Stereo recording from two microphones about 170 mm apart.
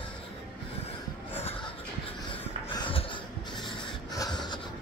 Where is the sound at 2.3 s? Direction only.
30° left (ahead or behind).